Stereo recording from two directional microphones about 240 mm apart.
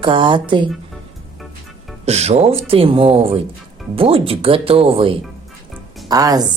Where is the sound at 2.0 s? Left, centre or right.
Right.